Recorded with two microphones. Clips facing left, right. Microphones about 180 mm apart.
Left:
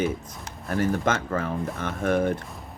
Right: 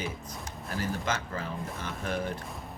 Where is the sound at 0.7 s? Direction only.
60° left (ahead or behind).